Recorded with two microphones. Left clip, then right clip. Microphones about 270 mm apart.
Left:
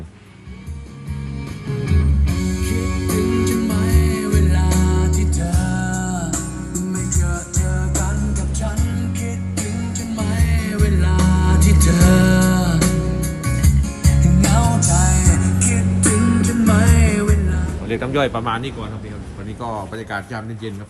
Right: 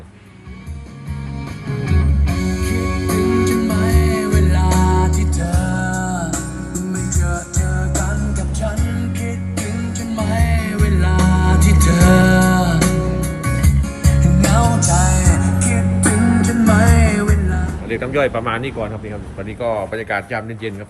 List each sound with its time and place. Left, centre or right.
1.8 s music: centre
17.8 s speech: centre
19.9 s speech: centre